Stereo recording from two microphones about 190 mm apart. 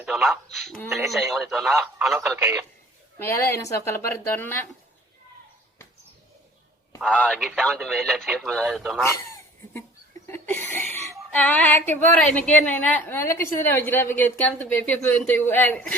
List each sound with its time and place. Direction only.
0.0 s speech: centre (ahead or behind)
3.2 s a woman's voice: 10° left (ahead or behind)
7.0 s speech: 5° left (ahead or behind)
9.0 s a sound: 15° left (ahead or behind)
11.3 s a woman's voice: 10° left (ahead or behind)